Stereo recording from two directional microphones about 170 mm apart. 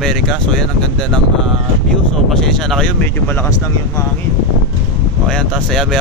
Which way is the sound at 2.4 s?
5° left (ahead or behind).